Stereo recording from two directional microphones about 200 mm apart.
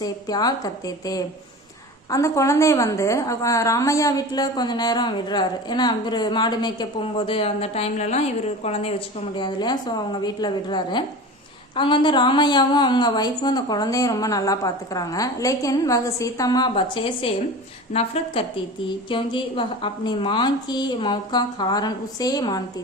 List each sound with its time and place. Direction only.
0.0 s a woman's voice: 20° left (ahead or behind)